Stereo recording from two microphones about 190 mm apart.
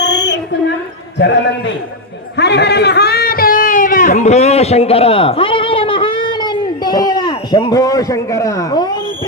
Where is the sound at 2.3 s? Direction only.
65° left (ahead or behind); by 9.0 s 20° left (ahead or behind).